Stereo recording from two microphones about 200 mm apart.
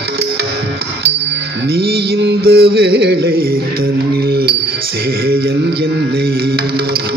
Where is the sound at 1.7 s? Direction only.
55° right (ahead or behind).